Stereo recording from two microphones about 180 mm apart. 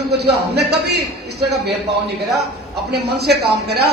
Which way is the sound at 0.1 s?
65° right (ahead or behind).